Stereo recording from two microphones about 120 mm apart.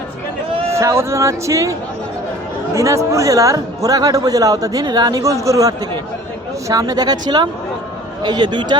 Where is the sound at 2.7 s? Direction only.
25° right (ahead or behind).